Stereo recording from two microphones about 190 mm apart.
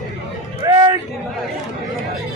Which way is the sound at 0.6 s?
20° right (ahead or behind).